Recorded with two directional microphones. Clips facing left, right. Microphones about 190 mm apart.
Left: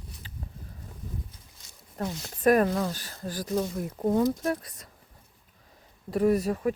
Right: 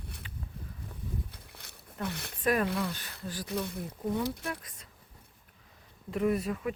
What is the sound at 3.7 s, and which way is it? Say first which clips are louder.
Speech: left 7 dB; 60° left (ahead or behind).